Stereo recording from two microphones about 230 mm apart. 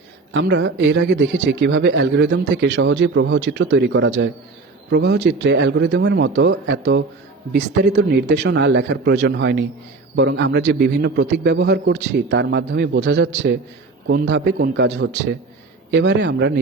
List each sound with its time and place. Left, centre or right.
0.3 s a man's voice: right